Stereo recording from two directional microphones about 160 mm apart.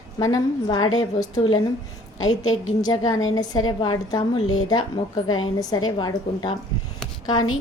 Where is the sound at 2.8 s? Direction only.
25° left (ahead or behind).